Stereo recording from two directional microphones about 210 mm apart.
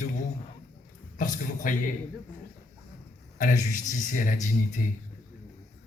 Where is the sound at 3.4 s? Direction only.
40° left (ahead or behind).